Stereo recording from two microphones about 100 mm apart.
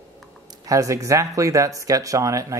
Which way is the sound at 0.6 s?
35° right (ahead or behind).